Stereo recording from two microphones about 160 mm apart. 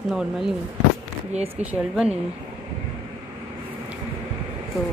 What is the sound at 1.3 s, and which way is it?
Speech, 45° right (ahead or behind).